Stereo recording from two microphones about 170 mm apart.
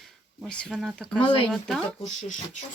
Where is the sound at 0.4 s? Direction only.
5° left (ahead or behind).